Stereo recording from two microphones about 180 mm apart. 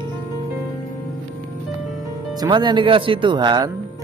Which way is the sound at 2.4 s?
25° right (ahead or behind).